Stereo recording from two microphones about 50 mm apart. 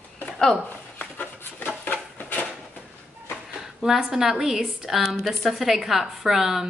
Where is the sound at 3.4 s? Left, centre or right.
Centre.